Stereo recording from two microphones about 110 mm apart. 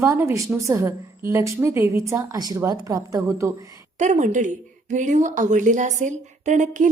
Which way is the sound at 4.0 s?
90° right.